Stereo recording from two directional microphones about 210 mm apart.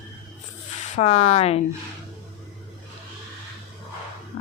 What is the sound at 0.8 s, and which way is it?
Speech, 30° left (ahead or behind).